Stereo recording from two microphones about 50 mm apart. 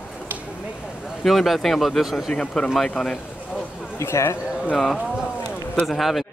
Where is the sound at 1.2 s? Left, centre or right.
Centre.